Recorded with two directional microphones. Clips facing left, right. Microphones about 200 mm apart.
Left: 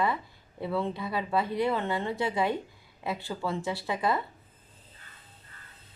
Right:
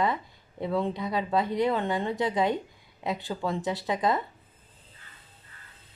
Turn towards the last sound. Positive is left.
turn(degrees=-20)  # may be behind; listen again after turning